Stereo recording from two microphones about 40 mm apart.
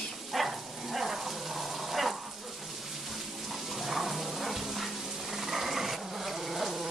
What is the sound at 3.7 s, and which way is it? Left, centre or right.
Dog, centre.